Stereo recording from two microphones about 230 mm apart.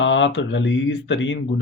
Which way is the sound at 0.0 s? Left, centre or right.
Left.